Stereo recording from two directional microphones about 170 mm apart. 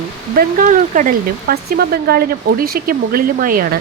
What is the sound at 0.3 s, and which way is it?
Speech, 55° right (ahead or behind).